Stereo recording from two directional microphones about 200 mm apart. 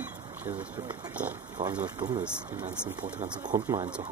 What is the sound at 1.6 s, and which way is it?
Speech, 35° right (ahead or behind).